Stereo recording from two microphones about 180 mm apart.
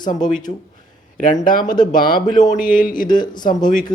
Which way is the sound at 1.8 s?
50° left (ahead or behind).